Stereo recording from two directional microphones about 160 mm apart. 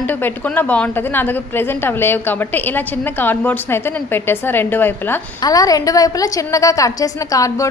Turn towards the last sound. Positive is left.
turn(degrees=20)  # may be behind; listen again after turning